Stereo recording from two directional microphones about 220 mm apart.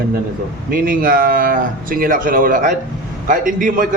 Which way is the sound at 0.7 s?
40° right (ahead or behind).